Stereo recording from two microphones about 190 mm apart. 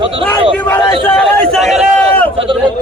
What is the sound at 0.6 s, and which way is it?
A man's voice, 10° left (ahead or behind).